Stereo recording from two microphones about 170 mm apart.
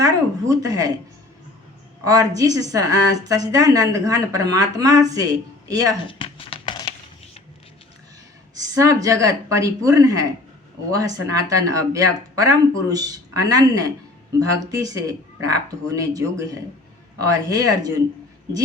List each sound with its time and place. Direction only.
0.0 s a woman's voice: 20° right (ahead or behind)
2.0 s a woman's voice: 20° right (ahead or behind)
6.1 s a sound: 30° left (ahead or behind)
8.5 s a woman's voice: 20° right (ahead or behind)